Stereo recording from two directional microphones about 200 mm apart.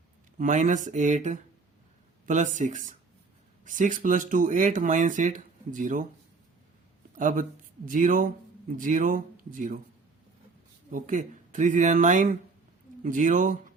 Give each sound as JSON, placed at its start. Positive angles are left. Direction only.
{"t": 0.3, "sound": "speech", "side_deg": -40}
{"t": 7.2, "sound": "speech", "side_deg": -40}
{"t": 10.9, "sound": "speech", "side_deg": -40}